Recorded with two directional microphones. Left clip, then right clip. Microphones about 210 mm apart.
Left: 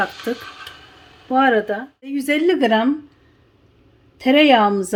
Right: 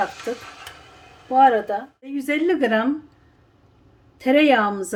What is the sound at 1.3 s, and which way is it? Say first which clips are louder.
Speech: right 1 dB; 45° left (ahead or behind).